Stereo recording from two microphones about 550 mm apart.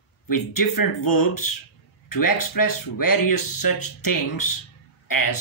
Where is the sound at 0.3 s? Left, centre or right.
Left.